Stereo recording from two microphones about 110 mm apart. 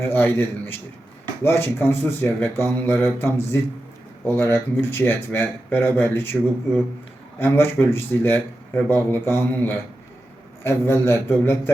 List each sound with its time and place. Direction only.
0.0 s speech: 20° left (ahead or behind)
7.3 s speech: 20° left (ahead or behind)